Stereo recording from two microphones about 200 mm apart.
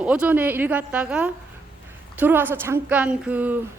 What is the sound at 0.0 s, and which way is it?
A woman's voice, 5° right (ahead or behind).